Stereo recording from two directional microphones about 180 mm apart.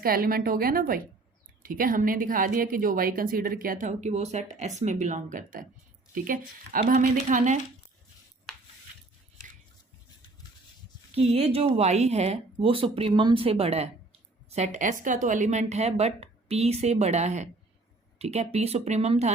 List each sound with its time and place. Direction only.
0.0 s a woman's voice: 55° right (ahead or behind)
11.1 s speech: 35° right (ahead or behind)